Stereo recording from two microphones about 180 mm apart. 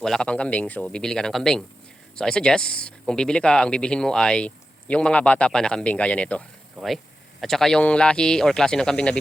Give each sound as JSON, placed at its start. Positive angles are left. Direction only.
{"t": 0.0, "sound": "speech", "side_deg": 5}